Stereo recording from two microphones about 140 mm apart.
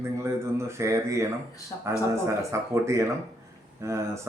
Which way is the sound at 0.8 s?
20° right (ahead or behind).